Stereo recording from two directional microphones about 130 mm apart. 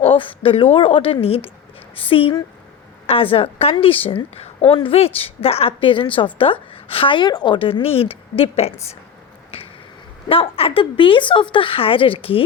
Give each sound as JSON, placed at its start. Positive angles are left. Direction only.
{"t": 0.0, "sound": "a woman's voice", "side_deg": 45}
{"t": 9.5, "sound": "finger snapping", "side_deg": 50}
{"t": 10.2, "sound": "a woman's voice", "side_deg": 45}